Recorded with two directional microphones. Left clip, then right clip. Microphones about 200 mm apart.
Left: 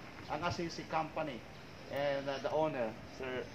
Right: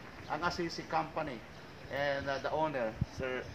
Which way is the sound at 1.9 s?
55° right (ahead or behind).